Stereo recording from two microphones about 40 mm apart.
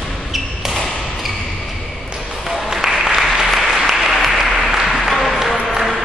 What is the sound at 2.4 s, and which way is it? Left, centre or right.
Applause, centre.